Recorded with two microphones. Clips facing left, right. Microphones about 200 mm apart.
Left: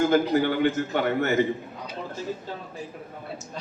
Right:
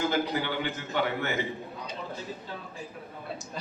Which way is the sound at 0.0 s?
45° left (ahead or behind).